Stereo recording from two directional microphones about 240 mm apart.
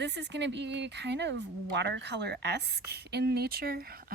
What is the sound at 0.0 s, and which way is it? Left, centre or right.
Speech, right.